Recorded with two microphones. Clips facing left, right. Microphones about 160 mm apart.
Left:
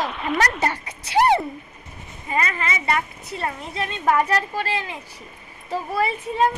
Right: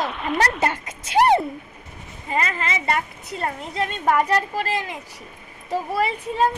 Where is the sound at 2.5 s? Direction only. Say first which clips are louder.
Even; 40° right (ahead or behind).